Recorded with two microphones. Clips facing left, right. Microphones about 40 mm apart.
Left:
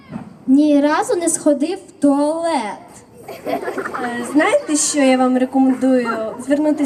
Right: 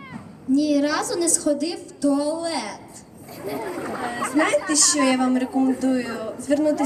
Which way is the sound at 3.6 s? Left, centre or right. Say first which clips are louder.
Left 6 dB; left.